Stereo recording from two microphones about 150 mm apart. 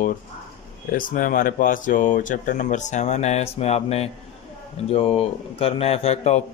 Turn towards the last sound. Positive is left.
turn(degrees=45)  # may be behind; listen again after turning